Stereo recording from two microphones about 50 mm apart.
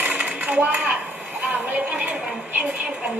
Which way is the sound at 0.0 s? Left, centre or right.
Right.